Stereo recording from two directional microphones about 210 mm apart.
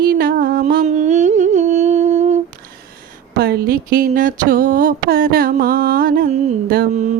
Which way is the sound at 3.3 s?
45° right (ahead or behind).